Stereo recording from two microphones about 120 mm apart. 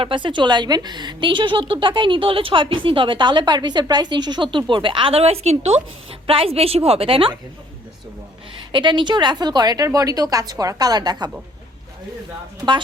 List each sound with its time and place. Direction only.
0.0 s a woman's voice: 45° right (ahead or behind)
8.7 s a woman's voice: 40° right (ahead or behind)